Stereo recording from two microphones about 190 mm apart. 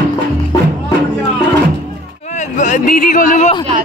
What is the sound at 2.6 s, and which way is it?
Music, 45° left (ahead or behind).